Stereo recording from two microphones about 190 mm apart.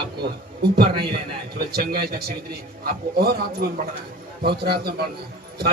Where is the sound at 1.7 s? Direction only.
50° right (ahead or behind).